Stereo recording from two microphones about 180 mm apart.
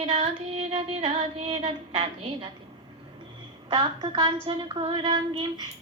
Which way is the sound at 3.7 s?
25° right (ahead or behind).